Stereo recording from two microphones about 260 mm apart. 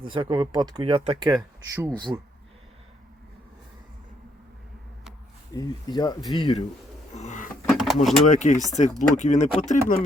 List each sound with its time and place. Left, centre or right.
0.1 s speech: centre
1.4 s speech: centre
5.5 s speech: centre
7.2 s speech: left
7.7 s vehicle: centre
8.3 s speech: left
8.5 s speech: centre
8.8 s speech: left